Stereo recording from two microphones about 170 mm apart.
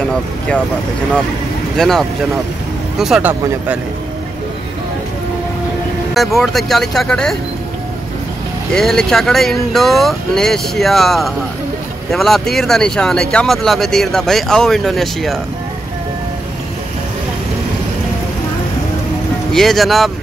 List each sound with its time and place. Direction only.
1.8 s speech: centre (ahead or behind)
6.1 s speech: centre (ahead or behind)
8.7 s speech: 5° left (ahead or behind)
19.5 s speech: centre (ahead or behind)